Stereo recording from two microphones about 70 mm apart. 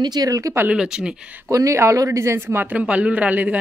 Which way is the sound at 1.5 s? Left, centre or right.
Right.